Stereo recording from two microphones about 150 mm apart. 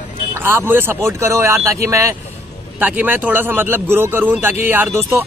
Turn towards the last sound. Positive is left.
turn(degrees=-15)  # may be behind; listen again after turning